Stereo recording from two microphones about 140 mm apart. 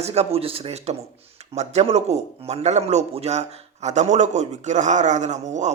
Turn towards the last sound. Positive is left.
turn(degrees=-60)  # may be behind; listen again after turning